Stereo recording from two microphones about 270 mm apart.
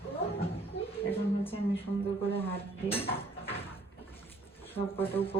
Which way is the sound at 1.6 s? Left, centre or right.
Left.